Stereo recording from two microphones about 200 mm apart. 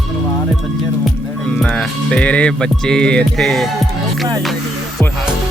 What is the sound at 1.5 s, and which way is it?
Music, 5° left (ahead or behind).